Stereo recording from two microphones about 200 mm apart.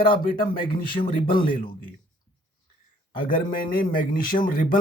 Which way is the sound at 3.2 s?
45° left (ahead or behind).